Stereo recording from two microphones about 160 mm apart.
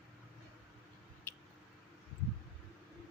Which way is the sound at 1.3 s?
15° left (ahead or behind).